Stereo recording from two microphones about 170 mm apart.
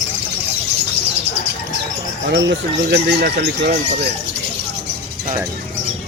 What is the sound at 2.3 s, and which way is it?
Speech, 90° right.